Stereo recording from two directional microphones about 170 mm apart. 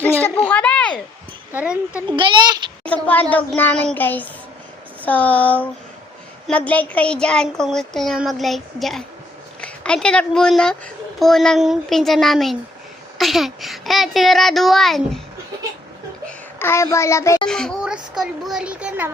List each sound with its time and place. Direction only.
0.0 s a sound: 10° left (ahead or behind)
1.5 s speech: 5° right (ahead or behind)
2.0 s a child's voice: 30° right (ahead or behind)
2.8 s a child's voice: 10° left (ahead or behind)
16.2 s a child's voice: 15° left (ahead or behind)
17.4 s speech: 5° left (ahead or behind)